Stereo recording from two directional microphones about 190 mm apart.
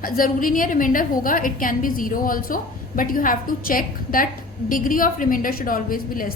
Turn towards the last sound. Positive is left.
turn(degrees=50)  # may be behind; listen again after turning